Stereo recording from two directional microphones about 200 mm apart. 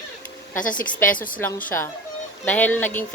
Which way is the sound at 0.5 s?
40° left (ahead or behind).